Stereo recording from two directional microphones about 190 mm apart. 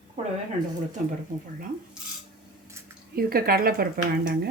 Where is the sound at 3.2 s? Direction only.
50° right (ahead or behind).